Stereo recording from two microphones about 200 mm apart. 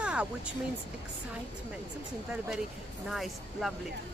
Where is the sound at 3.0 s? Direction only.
Centre (ahead or behind).